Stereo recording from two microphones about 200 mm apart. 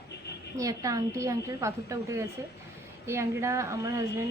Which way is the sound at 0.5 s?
15° right (ahead or behind).